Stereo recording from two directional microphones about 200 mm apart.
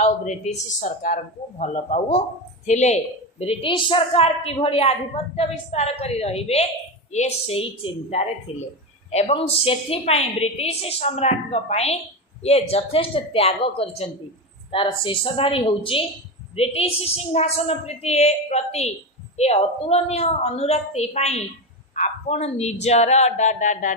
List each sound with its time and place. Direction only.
0.0 s a woman's voice: 35° left (ahead or behind)